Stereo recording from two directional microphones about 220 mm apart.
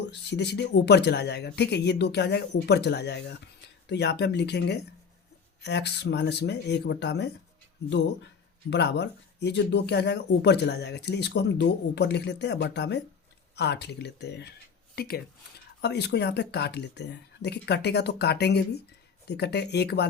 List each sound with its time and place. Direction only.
0.0 s speech: 50° left (ahead or behind)
8.7 s speech: 50° left (ahead or behind)